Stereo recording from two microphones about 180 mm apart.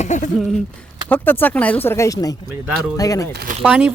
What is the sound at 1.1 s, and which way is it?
Speech, 10° left (ahead or behind).